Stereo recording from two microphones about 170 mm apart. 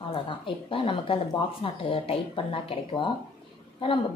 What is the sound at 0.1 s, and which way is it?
A woman's voice, 30° left (ahead or behind).